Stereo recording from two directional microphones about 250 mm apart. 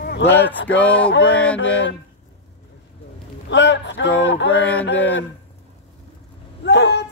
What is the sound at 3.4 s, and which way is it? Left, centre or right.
A man's voice, left.